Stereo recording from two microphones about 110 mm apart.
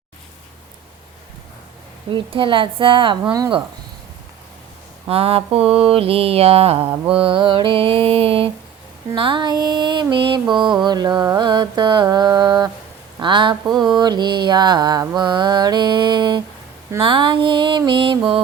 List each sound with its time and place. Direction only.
2.0 s speech: 50° right (ahead or behind)
5.0 s mantra: 60° right (ahead or behind)
9.1 s speech: 45° right (ahead or behind)
10.8 s mantra: 40° right (ahead or behind)
13.1 s a woman's voice: 45° right (ahead or behind)
13.9 s mantra: 40° right (ahead or behind)
15.1 s speech: 40° right (ahead or behind)